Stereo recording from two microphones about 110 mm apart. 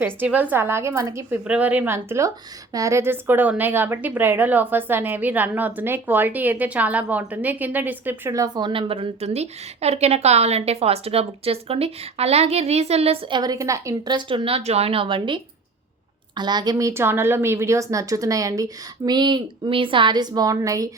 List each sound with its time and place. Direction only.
0.0 s a woman's voice: 15° right (ahead or behind)
1.5 s a woman's voice: 10° right (ahead or behind)
8.3 s a woman's voice: 30° right (ahead or behind)
8.6 s a woman's voice: 50° right (ahead or behind); by 13.1 s 70° right (ahead or behind)
13.3 s a woman's voice: 35° right (ahead or behind)